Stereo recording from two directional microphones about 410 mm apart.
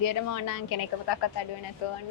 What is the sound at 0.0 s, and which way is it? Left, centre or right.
Speech, left.